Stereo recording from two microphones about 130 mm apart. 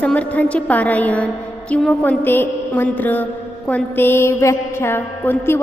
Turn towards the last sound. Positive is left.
turn(degrees=15)  # may be behind; listen again after turning